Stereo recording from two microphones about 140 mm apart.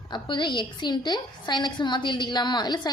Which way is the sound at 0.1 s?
35° left (ahead or behind).